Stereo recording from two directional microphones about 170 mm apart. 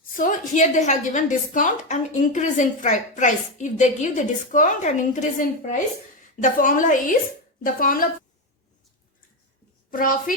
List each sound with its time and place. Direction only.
0.2 s a woman's voice: 45° left (ahead or behind)
6.4 s a woman's voice: 50° left (ahead or behind)
9.9 s speech: 55° left (ahead or behind)